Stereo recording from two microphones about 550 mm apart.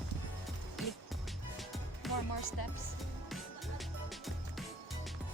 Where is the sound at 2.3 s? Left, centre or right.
Left.